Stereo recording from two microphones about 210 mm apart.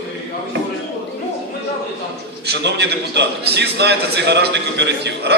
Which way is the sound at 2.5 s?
55° right (ahead or behind).